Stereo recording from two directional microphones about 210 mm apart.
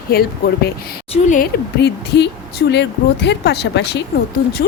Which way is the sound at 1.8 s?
55° left (ahead or behind).